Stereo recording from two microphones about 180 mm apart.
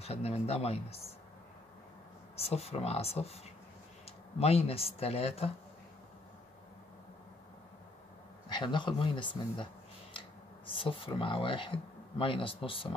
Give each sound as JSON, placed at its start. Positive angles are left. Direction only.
{"t": 0.0, "sound": "speech", "side_deg": 35}
{"t": 2.3, "sound": "speech", "side_deg": 35}
{"t": 4.4, "sound": "speech", "side_deg": 35}
{"t": 8.5, "sound": "speech", "side_deg": 25}
{"t": 10.7, "sound": "speech", "side_deg": 30}